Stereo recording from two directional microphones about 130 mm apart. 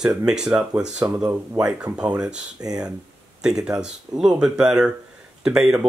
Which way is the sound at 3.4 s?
5° right (ahead or behind).